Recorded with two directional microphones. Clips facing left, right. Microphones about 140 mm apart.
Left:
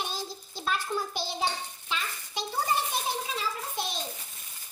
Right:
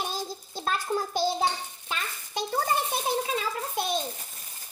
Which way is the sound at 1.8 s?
50° right (ahead or behind).